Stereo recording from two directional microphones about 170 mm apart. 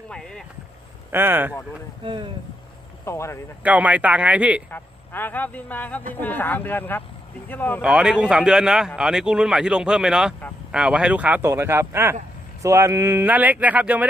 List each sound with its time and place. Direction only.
0.1 s speech: 5° left (ahead or behind)
1.1 s speech: 10° right (ahead or behind)
2.0 s speech: 30° right (ahead or behind)
3.1 s speech: 15° left (ahead or behind)
3.6 s speech: 10° right (ahead or behind)
4.6 s speech: 10° left (ahead or behind)
7.8 s a man's voice: 5° right (ahead or behind)